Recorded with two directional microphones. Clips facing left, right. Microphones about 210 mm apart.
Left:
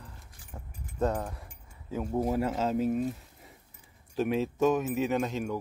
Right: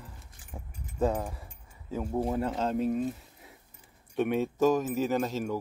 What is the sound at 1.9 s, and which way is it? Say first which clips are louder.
Speech: left 1 dB; centre (ahead or behind).